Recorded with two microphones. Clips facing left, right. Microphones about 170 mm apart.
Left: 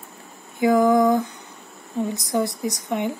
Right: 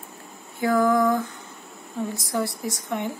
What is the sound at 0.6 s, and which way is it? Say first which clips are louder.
A woman's voice: left 4 dB; 20° left (ahead or behind).